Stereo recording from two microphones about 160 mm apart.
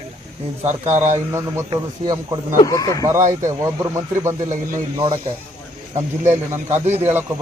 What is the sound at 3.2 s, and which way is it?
Speech, 50° right (ahead or behind).